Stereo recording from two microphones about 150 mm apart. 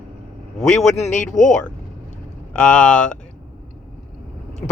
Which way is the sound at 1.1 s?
55° left (ahead or behind).